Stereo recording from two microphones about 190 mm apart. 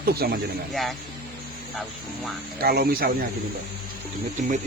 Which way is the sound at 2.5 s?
55° right (ahead or behind).